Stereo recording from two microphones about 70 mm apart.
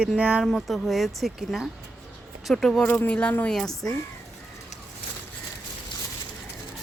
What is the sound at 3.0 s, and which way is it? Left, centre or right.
Speech, centre.